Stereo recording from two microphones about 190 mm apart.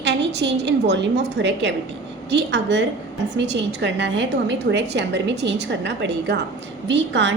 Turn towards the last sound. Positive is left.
turn(degrees=-70)  # may be behind; listen again after turning